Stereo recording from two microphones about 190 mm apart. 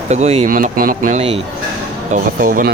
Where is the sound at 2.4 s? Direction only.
45° right (ahead or behind).